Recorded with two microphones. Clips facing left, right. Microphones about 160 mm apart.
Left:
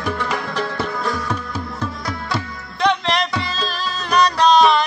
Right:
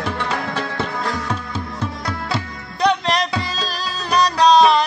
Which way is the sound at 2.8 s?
40° right (ahead or behind).